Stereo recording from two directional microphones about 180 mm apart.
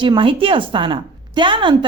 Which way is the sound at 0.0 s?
25° right (ahead or behind).